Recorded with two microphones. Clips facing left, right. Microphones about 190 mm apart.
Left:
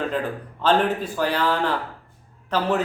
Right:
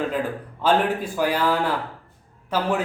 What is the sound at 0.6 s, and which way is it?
Speech, 10° right (ahead or behind).